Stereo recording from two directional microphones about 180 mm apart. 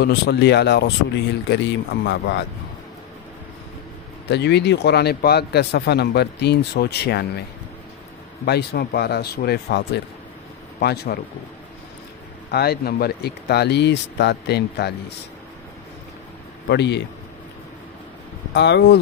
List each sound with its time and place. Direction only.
0.0 s speech: 70° left (ahead or behind)
4.3 s speech: 70° left (ahead or behind)
8.5 s speech: 65° left (ahead or behind)
12.4 s speech: 60° left (ahead or behind)
16.6 s speech: 70° left (ahead or behind)
18.5 s speech: 75° left (ahead or behind)